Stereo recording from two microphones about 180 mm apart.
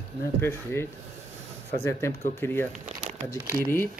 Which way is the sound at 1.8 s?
15° left (ahead or behind).